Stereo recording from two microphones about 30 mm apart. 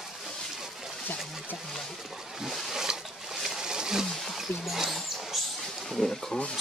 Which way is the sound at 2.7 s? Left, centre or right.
Centre.